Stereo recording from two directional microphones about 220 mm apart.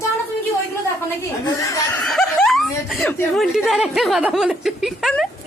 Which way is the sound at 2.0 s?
Centre (ahead or behind).